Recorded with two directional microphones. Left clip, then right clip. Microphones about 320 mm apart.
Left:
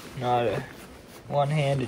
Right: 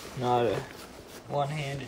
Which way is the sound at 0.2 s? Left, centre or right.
Centre.